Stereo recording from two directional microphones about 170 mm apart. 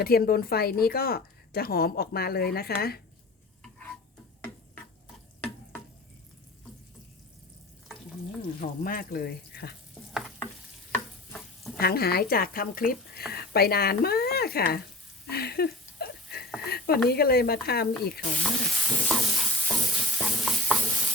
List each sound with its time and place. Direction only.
0.0 s a woman's voice: 65° left (ahead or behind)
8.6 s a woman's voice: 55° left (ahead or behind)
10.1 s stir: centre (ahead or behind)
11.8 s a woman's voice: 65° left (ahead or behind)
15.3 s a sound: 65° left (ahead or behind)
16.6 s a woman's voice: 65° left (ahead or behind)
17.7 s stir: 65° left (ahead or behind)
18.7 s stir: centre (ahead or behind)